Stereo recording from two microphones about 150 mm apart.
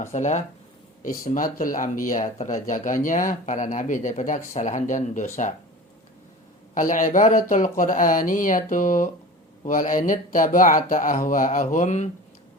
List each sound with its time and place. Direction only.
0.1 s speech: 50° left (ahead or behind)
1.0 s speech: 70° left (ahead or behind)
6.7 s speech: 60° left (ahead or behind)